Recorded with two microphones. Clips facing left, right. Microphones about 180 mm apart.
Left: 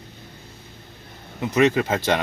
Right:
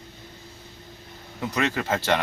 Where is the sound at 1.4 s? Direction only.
20° left (ahead or behind).